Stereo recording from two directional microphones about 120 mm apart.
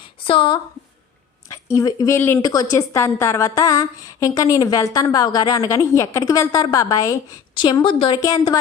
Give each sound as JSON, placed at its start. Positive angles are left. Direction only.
{"t": 0.3, "sound": "a woman's voice", "side_deg": 45}
{"t": 1.5, "sound": "a woman's voice", "side_deg": 25}
{"t": 2.4, "sound": "a woman's voice", "side_deg": 30}
{"t": 7.5, "sound": "a woman's voice", "side_deg": 40}
{"t": 8.2, "sound": "a woman's voice", "side_deg": 30}